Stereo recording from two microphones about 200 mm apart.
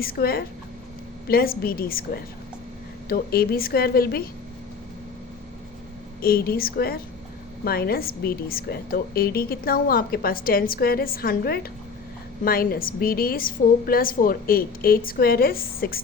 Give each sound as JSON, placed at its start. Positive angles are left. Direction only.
{"t": 0.0, "sound": "a woman's voice", "side_deg": 50}
{"t": 6.2, "sound": "a woman's voice", "side_deg": 50}